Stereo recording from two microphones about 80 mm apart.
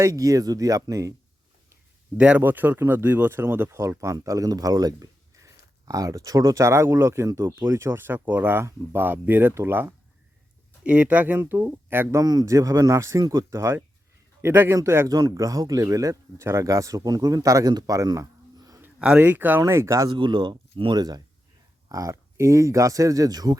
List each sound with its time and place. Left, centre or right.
0.0 s speech: right
2.1 s a man's voice: centre
10.8 s speech: centre
12.2 s speech: right
14.4 s speech: right
15.1 s speech: right
18.9 s speech: centre
19.2 s speech: right
20.1 s speech: right
21.8 s speech: right